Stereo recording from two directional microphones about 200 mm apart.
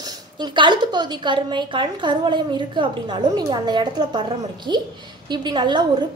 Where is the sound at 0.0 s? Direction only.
20° right (ahead or behind).